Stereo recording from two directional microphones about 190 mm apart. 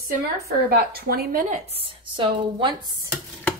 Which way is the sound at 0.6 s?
55° right (ahead or behind).